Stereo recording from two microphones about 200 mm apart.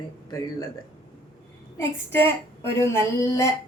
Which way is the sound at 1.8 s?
10° left (ahead or behind).